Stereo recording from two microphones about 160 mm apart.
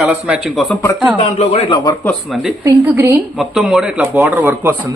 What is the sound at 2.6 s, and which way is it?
Speech, 15° right (ahead or behind).